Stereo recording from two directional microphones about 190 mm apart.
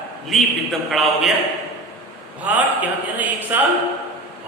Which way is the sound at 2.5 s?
5° right (ahead or behind).